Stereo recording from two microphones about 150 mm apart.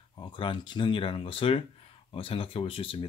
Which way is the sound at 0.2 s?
35° left (ahead or behind).